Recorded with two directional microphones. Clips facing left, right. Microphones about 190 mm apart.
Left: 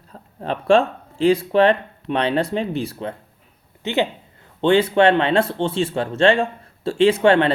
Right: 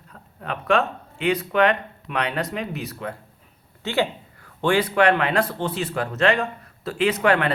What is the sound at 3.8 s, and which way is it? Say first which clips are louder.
A man's voice: left 2 dB; 20° left (ahead or behind).